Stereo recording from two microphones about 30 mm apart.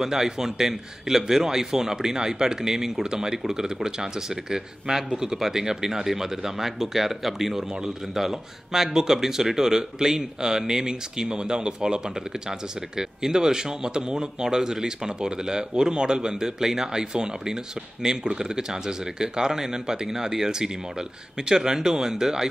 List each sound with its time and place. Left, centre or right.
0.0 s speech: centre